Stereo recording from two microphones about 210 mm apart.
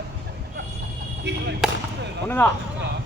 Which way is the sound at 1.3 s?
55° right (ahead or behind).